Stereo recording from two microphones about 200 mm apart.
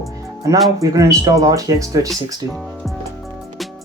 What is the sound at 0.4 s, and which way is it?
Speech, 15° right (ahead or behind).